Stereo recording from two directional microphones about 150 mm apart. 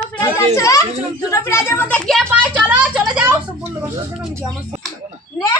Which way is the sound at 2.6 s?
10° right (ahead or behind).